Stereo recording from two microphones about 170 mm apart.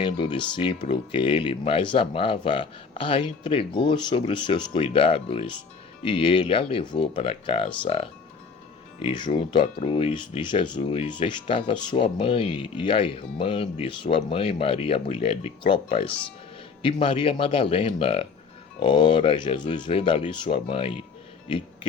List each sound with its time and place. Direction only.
0.0 s speech: 30° left (ahead or behind)